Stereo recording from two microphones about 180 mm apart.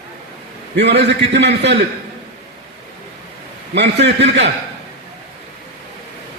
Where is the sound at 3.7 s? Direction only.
70° right (ahead or behind).